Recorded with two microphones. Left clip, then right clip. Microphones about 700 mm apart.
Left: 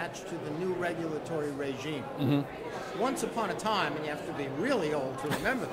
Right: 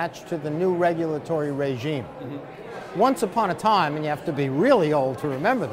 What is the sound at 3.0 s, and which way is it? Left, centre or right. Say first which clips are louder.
Speech: right 11 dB; right.